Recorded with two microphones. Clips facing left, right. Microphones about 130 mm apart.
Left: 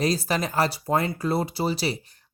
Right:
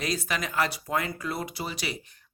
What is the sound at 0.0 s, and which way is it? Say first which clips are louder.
Speech: left 6 dB; 35° left (ahead or behind).